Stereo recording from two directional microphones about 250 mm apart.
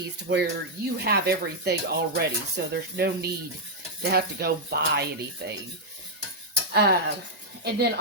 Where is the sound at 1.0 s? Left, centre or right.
Right.